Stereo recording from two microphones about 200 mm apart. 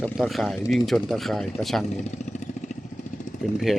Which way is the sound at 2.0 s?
35° left (ahead or behind).